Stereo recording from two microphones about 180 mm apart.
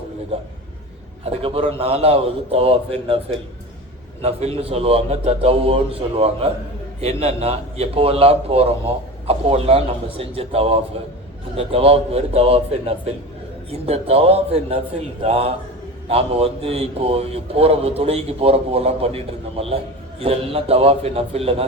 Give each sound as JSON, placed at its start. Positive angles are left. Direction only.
{"t": 0.3, "sound": "a man's voice", "side_deg": -30}